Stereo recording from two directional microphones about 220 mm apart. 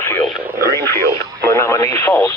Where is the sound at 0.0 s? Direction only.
10° left (ahead or behind).